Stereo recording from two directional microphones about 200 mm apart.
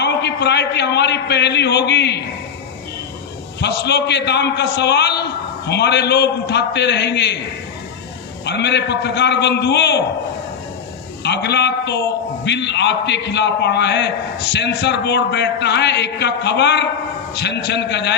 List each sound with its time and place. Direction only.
0.0 s a man's voice: 55° left (ahead or behind)
3.6 s a man's voice: 55° left (ahead or behind)
8.4 s a man's voice: 60° left (ahead or behind)
11.2 s a man's voice: 55° left (ahead or behind)